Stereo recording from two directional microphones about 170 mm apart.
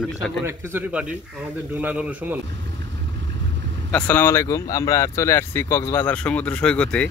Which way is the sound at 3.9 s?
10° left (ahead or behind).